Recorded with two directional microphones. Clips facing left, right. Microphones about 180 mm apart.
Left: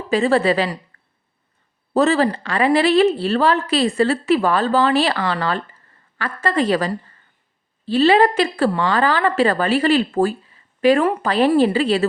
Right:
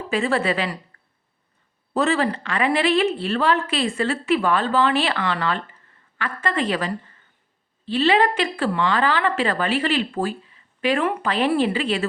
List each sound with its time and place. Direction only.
0.1 s speech: 35° left (ahead or behind)
1.9 s speech: 40° left (ahead or behind)